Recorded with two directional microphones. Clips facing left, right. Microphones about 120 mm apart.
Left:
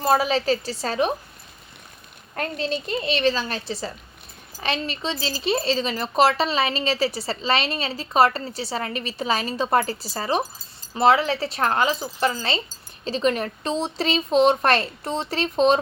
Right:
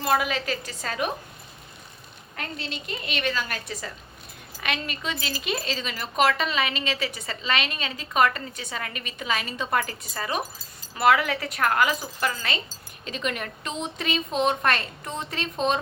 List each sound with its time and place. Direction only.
0.0 s speech: 35° left (ahead or behind)
2.3 s a woman's voice: 40° left (ahead or behind)